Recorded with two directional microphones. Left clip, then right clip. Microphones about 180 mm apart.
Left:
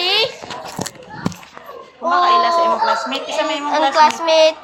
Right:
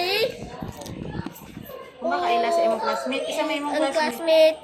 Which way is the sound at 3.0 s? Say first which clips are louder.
Left 5 dB; 65° right (ahead or behind).